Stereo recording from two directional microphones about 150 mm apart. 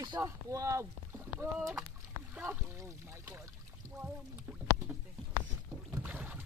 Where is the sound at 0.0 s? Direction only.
25° right (ahead or behind).